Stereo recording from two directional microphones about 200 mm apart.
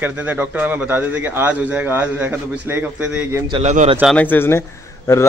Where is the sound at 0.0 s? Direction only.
10° right (ahead or behind).